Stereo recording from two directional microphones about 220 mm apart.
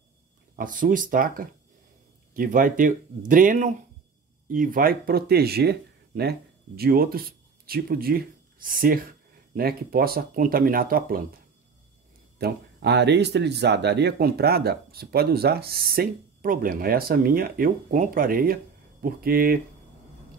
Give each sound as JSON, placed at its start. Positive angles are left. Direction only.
{"t": 0.6, "sound": "speech", "side_deg": -40}
{"t": 12.4, "sound": "speech", "side_deg": -50}